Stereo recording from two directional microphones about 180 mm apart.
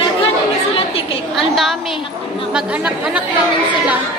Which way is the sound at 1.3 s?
Centre (ahead or behind).